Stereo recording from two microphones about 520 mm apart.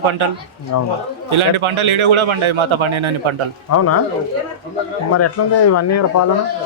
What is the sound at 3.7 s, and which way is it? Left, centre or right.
Speech, left.